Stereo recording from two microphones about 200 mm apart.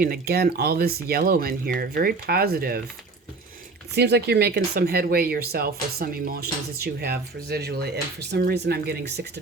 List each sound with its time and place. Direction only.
0.0 s speech: 50° right (ahead or behind)
3.9 s speech: 55° right (ahead or behind)